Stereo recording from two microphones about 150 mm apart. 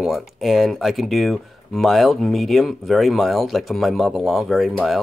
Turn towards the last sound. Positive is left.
turn(degrees=0)  # may be behind; listen again after turning